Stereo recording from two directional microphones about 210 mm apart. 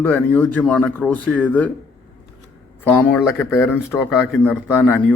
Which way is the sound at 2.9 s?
5° left (ahead or behind).